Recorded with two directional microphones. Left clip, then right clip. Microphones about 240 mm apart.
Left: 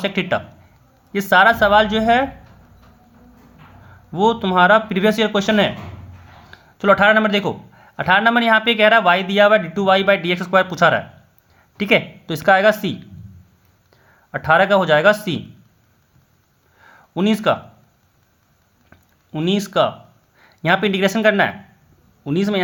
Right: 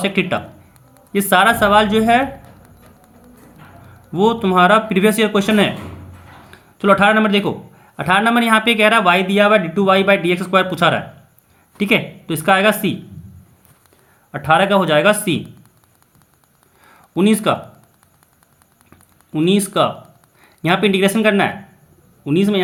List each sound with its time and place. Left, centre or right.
0.0 s a man's voice: left
4.1 s a man's voice: centre
14.3 s a man's voice: left
16.8 s a sound: centre
18.9 s a sound: left
20.4 s a man's voice: left